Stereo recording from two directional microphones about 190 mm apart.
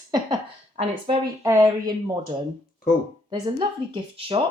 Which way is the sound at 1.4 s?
15° right (ahead or behind).